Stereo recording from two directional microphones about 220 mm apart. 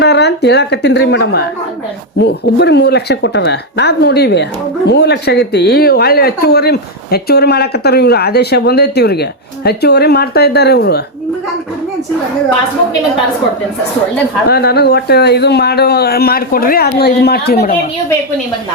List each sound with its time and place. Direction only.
0.0 s speech: 50° left (ahead or behind)
14.4 s speech: 45° left (ahead or behind)